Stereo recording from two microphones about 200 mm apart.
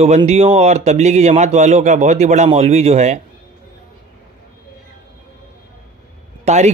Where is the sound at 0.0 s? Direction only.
30° right (ahead or behind).